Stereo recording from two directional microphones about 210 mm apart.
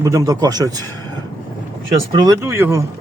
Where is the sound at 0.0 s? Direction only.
15° right (ahead or behind).